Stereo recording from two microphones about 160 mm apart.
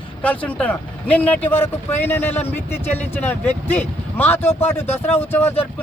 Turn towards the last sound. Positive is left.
turn(degrees=10)  # may be behind; listen again after turning